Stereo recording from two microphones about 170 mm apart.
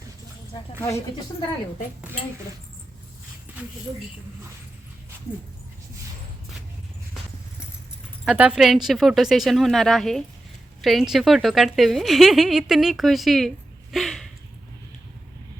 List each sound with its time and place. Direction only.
0.8 s speech: 15° left (ahead or behind)
8.2 s speech: 5° right (ahead or behind)
13.9 s a sound: centre (ahead or behind)